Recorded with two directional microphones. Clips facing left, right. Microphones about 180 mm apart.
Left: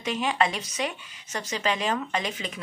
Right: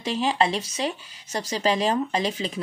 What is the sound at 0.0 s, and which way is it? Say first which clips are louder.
Speech: right 2 dB; 30° right (ahead or behind).